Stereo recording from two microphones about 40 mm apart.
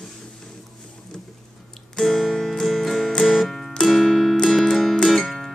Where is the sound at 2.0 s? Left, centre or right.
Centre.